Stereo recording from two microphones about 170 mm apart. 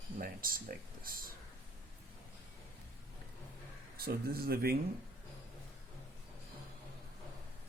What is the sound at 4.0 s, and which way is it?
Speech, 65° right (ahead or behind).